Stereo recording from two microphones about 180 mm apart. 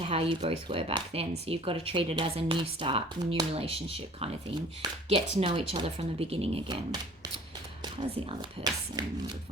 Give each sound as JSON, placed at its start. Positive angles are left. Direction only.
{"t": 0.0, "sound": "speech", "side_deg": -30}
{"t": 5.4, "sound": "speech", "side_deg": -30}
{"t": 8.4, "sound": "speech", "side_deg": -25}